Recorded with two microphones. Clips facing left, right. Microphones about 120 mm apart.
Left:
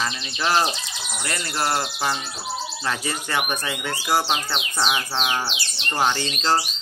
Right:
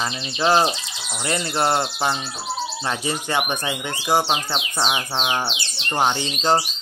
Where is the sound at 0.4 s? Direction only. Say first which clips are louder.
Right 4 dB; 25° right (ahead or behind).